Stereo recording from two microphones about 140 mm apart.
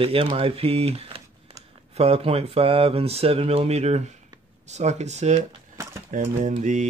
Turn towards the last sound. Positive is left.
turn(degrees=-60)  # may be behind; listen again after turning